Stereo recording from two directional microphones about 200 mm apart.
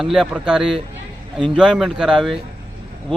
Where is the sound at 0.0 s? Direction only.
Centre (ahead or behind).